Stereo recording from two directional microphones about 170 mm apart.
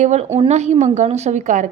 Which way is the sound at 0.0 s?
40° right (ahead or behind).